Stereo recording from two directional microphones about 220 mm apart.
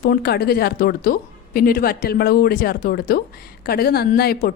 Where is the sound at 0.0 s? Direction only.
45° left (ahead or behind).